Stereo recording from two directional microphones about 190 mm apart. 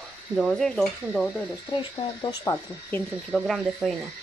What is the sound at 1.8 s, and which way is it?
Speech, 20° left (ahead or behind).